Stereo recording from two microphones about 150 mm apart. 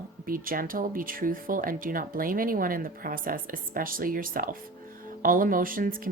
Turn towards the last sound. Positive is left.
turn(degrees=-70)  # may be behind; listen again after turning